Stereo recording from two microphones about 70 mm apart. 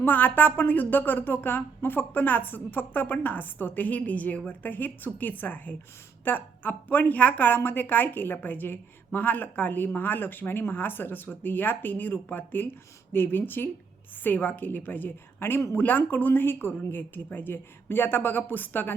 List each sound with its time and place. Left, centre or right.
0.0 s a woman's voice: left